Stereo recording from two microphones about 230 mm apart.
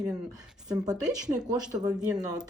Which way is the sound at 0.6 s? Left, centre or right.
Centre.